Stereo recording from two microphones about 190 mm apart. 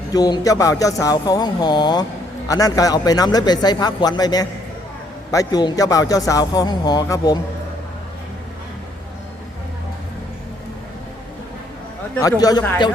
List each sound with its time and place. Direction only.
0.1 s a man's voice: 20° left (ahead or behind)
12.2 s a man's voice: 20° left (ahead or behind)